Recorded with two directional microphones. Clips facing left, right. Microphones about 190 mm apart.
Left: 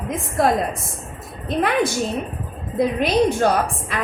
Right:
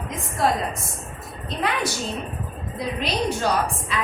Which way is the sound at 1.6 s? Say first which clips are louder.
Left 6 dB; 50° left (ahead or behind).